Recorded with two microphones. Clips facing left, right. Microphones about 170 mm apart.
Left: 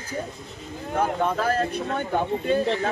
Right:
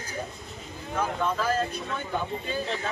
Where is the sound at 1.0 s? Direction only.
55° left (ahead or behind).